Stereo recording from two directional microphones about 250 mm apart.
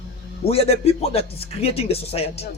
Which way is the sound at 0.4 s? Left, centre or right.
Left.